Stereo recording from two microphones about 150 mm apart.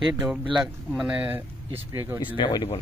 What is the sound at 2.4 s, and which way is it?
Speech, 30° left (ahead or behind).